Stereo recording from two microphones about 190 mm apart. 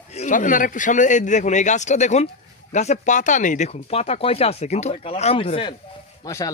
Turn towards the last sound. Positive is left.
turn(degrees=20)  # may be behind; listen again after turning